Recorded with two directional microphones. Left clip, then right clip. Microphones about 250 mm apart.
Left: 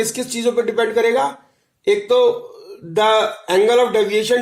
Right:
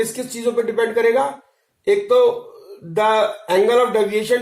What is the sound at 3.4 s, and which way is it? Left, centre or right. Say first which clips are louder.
Speech: left 2 dB; left.